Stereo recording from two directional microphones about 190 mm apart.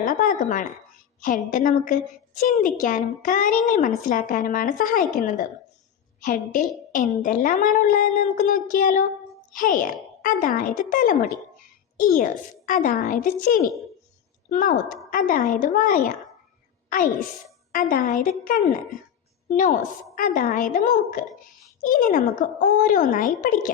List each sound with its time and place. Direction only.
0.0 s a woman's voice: 45° left (ahead or behind)